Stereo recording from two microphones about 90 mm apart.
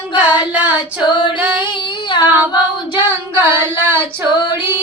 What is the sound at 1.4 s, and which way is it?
Female singing, 15° right (ahead or behind).